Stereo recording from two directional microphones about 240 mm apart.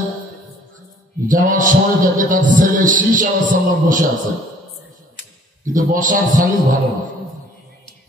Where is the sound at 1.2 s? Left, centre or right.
Right.